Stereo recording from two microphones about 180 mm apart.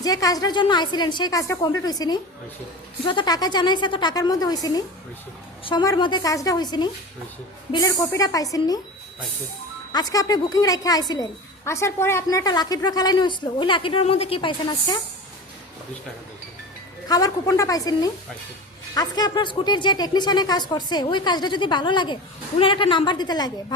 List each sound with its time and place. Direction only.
0.0 s speech: 20° left (ahead or behind)
9.9 s speech: 20° left (ahead or behind)
17.1 s speech: 20° left (ahead or behind)